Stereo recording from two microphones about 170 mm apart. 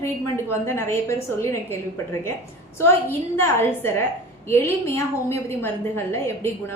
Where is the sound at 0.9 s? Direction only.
15° left (ahead or behind).